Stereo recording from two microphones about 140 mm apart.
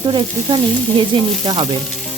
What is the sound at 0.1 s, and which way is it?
Frying, 35° right (ahead or behind).